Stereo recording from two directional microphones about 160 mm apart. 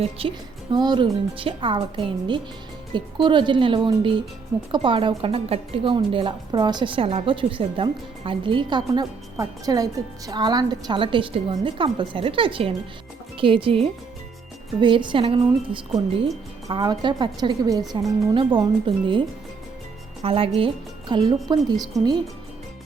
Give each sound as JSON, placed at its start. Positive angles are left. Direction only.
{"t": 0.0, "sound": "a woman's voice", "side_deg": -35}
{"t": 20.2, "sound": "a woman's voice", "side_deg": -35}
{"t": 22.0, "sound": "speech", "side_deg": 0}